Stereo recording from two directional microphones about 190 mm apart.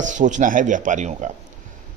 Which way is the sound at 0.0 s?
40° right (ahead or behind).